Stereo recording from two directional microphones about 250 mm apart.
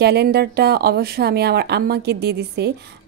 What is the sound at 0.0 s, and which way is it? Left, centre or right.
A woman's voice, right.